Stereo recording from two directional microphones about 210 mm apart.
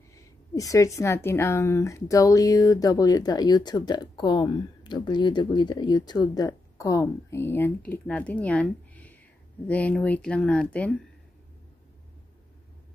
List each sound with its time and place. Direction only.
0.1 s a woman's voice: 15° left (ahead or behind)